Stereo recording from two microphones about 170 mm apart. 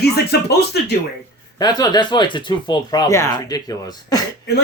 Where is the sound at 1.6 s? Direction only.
25° left (ahead or behind).